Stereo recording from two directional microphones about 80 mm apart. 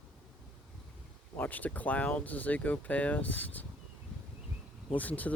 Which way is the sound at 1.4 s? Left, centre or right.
Left.